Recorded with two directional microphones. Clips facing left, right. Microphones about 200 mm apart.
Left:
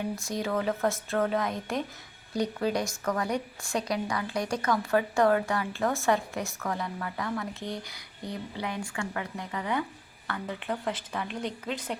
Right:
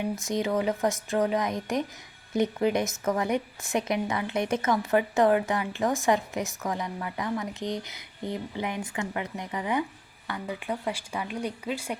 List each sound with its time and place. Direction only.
0.2 s a woman's voice: 20° right (ahead or behind)